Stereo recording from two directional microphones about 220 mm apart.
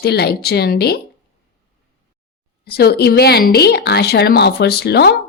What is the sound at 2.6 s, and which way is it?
Speech, 45° left (ahead or behind).